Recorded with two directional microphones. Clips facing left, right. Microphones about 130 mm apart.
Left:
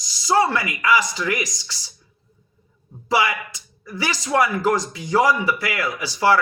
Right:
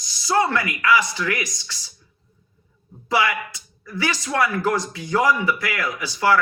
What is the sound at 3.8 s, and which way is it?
A man's voice, 15° left (ahead or behind).